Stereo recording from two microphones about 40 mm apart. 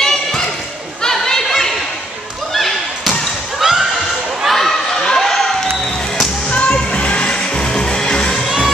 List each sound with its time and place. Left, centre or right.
0.0 s a sound: centre
2.5 s basketball bounce: centre
3.6 s neigh: centre
4.5 s a sound: centre
6.5 s music: left
8.5 s music: centre